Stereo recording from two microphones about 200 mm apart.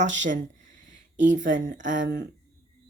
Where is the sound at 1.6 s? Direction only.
40° right (ahead or behind).